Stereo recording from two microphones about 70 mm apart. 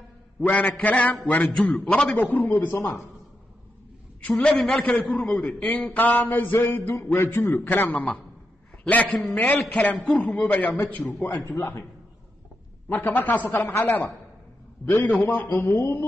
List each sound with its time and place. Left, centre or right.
0.5 s a man's voice: centre
4.2 s a man's voice: centre
5.1 s a man's voice: centre
7.2 s a man's voice: left
11.4 s a man's voice: left
13.0 s speech: left
15.6 s a man's voice: left